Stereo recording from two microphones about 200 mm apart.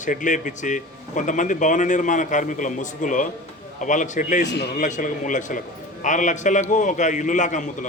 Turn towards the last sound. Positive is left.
turn(degrees=40)  # may be behind; listen again after turning